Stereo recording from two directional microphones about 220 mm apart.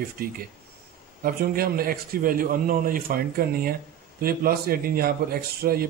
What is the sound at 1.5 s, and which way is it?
A man's voice, 40° right (ahead or behind).